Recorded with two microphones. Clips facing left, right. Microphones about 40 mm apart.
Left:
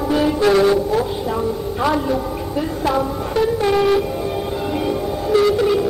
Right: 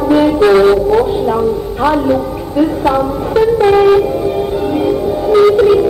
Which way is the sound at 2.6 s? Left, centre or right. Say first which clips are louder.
Right 8 dB; centre.